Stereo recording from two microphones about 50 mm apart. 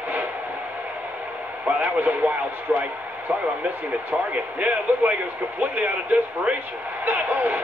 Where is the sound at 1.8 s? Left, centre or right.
Right.